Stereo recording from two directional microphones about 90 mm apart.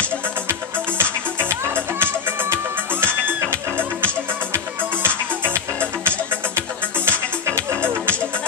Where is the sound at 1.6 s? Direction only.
25° right (ahead or behind).